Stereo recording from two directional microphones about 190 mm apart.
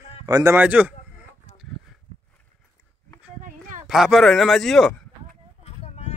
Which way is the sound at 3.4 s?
45° right (ahead or behind).